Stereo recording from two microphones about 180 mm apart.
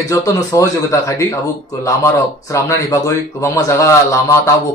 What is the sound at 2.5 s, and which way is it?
Speech, 15° left (ahead or behind).